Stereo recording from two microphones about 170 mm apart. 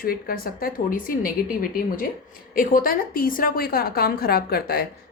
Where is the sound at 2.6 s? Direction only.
55° left (ahead or behind).